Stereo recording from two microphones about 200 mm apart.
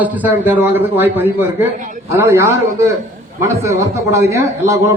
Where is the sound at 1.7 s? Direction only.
40° right (ahead or behind).